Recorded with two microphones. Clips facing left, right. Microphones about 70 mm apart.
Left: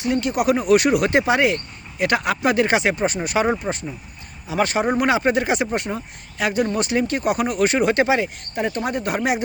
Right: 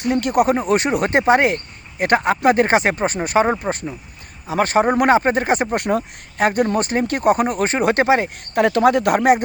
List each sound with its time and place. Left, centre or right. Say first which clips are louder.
0.0 s speech: right 4 dB; right
0.4 s speech: left 1 dB; right
3.6 s speech: right 3 dB; right
4.4 s speech: right 4 dB; right
5.8 s speech: right 8 dB; right
6.4 s speech: right 4 dB; right
8.5 s speech: right 9 dB; right